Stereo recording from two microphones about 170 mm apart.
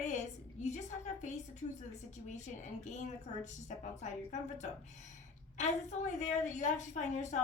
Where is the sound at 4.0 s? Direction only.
45° left (ahead or behind).